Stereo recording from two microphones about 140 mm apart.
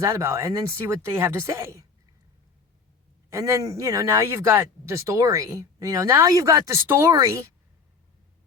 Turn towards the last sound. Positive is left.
turn(degrees=-20)  # may be behind; listen again after turning